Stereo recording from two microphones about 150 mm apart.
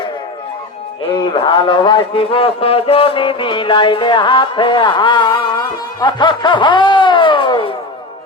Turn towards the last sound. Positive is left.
turn(degrees=35)  # may be behind; listen again after turning